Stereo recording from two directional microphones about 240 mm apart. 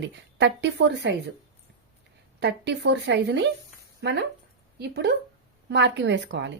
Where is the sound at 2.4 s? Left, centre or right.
Right.